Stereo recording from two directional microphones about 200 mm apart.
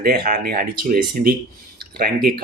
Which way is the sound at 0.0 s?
45° right (ahead or behind).